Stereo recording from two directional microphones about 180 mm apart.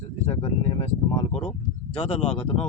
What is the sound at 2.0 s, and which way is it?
Speech, 30° left (ahead or behind).